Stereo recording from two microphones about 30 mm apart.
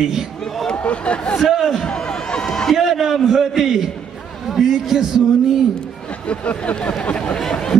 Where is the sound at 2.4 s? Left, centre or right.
Centre.